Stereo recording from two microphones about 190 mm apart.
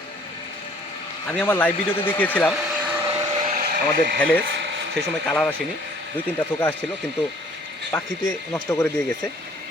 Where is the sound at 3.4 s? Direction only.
45° right (ahead or behind).